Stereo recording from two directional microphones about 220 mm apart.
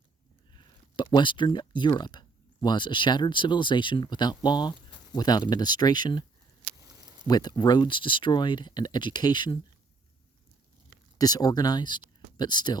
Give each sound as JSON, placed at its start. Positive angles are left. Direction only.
{"t": 0.5, "sound": "speech", "side_deg": 20}
{"t": 7.3, "sound": "speech", "side_deg": 20}
{"t": 11.2, "sound": "speech", "side_deg": 15}